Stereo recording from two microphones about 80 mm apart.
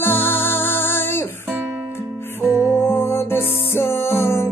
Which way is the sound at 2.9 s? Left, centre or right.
Left.